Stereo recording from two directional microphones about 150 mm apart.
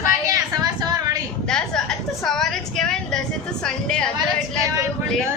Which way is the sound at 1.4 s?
5° left (ahead or behind).